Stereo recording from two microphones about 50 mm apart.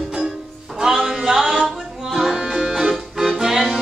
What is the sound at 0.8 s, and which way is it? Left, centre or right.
Music, centre.